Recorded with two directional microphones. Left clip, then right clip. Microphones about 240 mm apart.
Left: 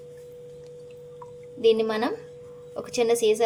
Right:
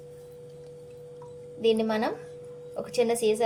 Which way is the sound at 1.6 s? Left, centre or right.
Left.